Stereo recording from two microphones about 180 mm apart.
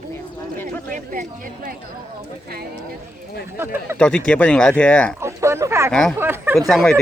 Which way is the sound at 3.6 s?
10° right (ahead or behind).